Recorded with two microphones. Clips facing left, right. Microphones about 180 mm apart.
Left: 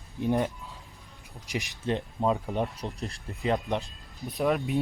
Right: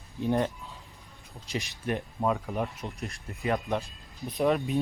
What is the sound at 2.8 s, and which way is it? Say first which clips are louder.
Speech: left 2 dB; 35° left (ahead or behind).